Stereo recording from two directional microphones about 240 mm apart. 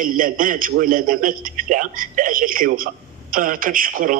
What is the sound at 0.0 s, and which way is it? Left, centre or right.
A man's voice, right.